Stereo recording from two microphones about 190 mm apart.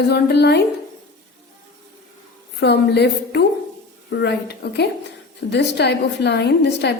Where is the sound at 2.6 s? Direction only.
60° left (ahead or behind).